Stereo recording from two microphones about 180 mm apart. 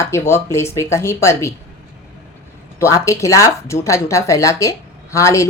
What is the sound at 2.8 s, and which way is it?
A woman's voice, 15° left (ahead or behind).